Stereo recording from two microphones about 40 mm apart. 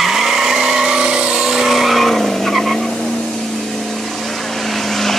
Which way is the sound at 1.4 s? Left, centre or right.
Centre.